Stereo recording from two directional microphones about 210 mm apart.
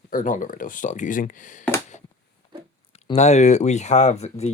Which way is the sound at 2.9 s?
30° left (ahead or behind).